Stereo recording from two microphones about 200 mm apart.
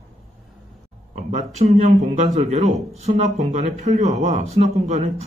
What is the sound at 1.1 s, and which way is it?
A man's voice, 35° right (ahead or behind).